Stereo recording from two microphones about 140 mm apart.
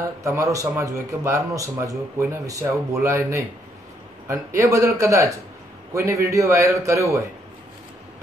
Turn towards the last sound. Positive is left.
turn(degrees=-20)  # may be behind; listen again after turning